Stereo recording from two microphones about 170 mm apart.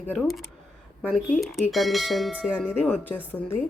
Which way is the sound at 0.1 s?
Centre (ahead or behind).